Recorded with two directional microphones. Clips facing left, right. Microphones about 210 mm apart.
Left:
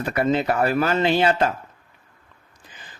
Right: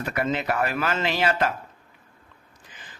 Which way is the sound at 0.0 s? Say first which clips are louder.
Left 5 dB; 30° left (ahead or behind).